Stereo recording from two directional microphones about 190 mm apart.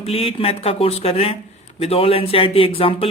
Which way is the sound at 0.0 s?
30° left (ahead or behind).